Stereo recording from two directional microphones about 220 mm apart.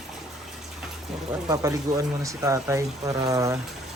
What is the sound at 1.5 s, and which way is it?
Speech, 15° right (ahead or behind).